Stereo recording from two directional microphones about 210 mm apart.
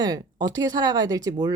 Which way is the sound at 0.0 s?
20° right (ahead or behind).